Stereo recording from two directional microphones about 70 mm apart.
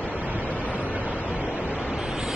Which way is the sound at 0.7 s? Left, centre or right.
Centre.